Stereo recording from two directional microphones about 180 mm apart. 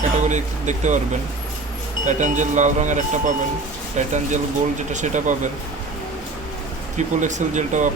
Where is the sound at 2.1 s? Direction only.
45° right (ahead or behind).